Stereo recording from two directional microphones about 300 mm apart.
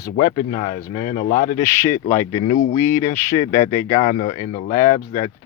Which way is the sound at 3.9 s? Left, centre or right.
Left.